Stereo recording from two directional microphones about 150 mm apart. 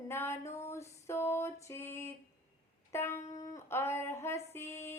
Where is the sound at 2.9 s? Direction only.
15° left (ahead or behind).